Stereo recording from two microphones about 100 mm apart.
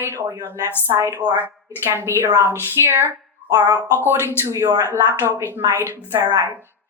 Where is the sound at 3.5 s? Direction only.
35° right (ahead or behind).